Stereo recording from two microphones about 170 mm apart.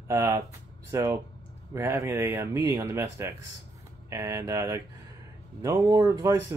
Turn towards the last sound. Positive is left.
turn(degrees=-20)  # may be behind; listen again after turning